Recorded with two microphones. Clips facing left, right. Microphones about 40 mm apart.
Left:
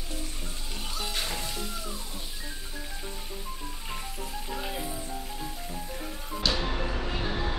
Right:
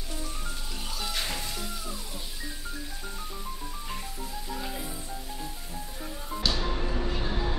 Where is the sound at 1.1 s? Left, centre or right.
Centre.